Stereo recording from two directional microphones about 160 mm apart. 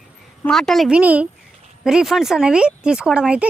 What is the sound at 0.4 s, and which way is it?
Speech, 5° left (ahead or behind).